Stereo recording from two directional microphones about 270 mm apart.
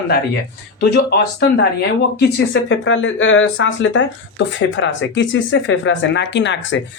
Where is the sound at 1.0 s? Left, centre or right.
Left.